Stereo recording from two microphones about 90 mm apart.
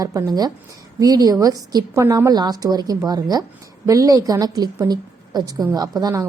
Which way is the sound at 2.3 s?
50° right (ahead or behind).